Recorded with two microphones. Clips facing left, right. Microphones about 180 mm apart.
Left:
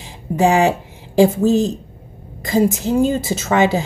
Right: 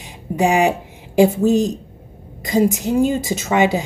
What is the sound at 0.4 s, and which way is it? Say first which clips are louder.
Speech: left 2 dB; 15° right (ahead or behind).